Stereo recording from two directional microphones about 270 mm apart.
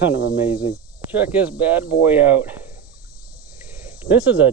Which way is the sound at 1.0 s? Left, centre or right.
Centre.